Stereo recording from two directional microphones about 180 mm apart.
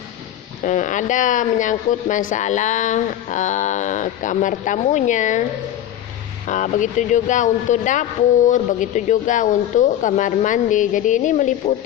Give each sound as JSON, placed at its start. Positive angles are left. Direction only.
{"t": 0.6, "sound": "speech", "side_deg": 45}
{"t": 6.5, "sound": "speech", "side_deg": 45}